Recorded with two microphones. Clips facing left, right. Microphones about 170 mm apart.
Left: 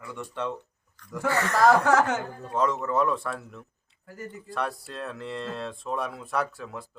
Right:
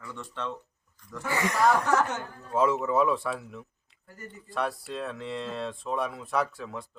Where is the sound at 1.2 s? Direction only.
15° right (ahead or behind).